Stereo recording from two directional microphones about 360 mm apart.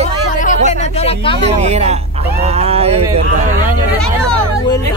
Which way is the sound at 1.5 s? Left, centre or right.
Centre.